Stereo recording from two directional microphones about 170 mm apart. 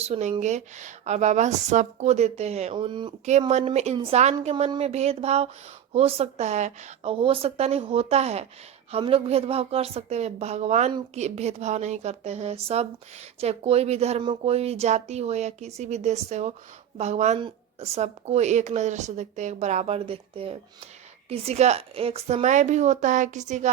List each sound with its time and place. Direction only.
0.0 s speech: 40° right (ahead or behind)
3.5 s speech: 40° right (ahead or behind)